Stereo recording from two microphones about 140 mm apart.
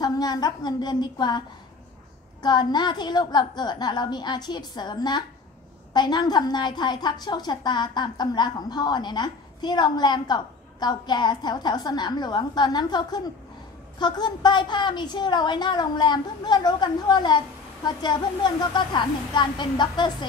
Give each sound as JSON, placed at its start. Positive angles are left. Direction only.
{"t": 0.0, "sound": "a woman's voice", "side_deg": 30}
{"t": 2.4, "sound": "a woman's voice", "side_deg": 30}